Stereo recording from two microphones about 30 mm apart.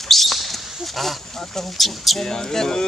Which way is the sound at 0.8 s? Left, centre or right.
Centre.